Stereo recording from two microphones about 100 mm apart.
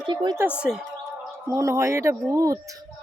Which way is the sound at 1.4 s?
30° right (ahead or behind).